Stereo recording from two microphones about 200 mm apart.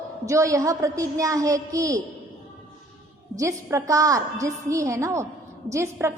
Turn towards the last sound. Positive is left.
turn(degrees=-15)  # may be behind; listen again after turning